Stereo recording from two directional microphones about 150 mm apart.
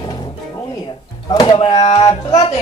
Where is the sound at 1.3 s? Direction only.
35° left (ahead or behind).